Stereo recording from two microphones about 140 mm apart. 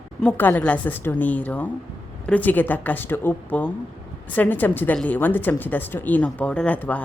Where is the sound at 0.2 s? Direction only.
15° left (ahead or behind).